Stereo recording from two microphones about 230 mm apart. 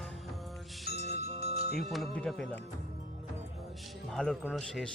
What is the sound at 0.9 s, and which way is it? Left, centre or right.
Music, left.